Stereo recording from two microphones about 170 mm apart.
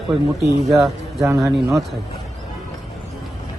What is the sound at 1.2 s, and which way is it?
Speech, 15° right (ahead or behind).